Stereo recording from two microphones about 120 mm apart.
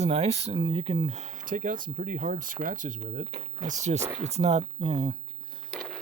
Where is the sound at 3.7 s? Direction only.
75° right (ahead or behind); by 5.1 s 50° right (ahead or behind).